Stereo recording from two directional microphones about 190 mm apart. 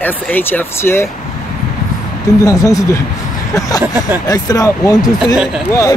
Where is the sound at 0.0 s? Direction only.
10° left (ahead or behind).